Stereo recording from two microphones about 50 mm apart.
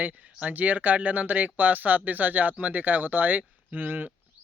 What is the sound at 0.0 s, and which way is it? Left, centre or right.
Speech, right.